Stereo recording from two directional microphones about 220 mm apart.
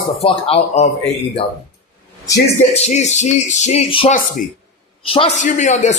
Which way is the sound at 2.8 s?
30° left (ahead or behind).